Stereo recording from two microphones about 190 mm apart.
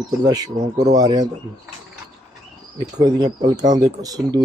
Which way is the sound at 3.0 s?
20° right (ahead or behind).